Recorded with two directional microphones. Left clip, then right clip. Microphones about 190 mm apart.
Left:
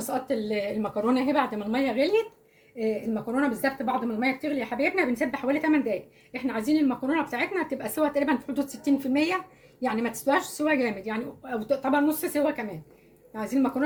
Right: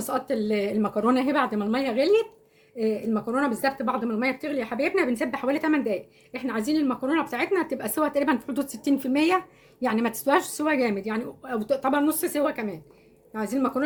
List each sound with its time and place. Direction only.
0.1 s a woman's voice: 55° right (ahead or behind)